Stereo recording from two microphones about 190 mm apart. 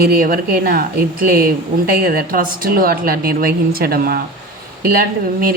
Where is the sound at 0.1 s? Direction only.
50° right (ahead or behind).